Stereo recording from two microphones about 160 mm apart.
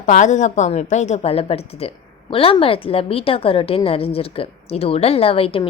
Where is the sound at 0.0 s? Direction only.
50° left (ahead or behind).